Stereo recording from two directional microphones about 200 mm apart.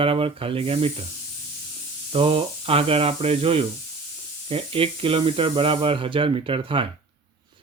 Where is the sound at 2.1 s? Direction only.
25° right (ahead or behind).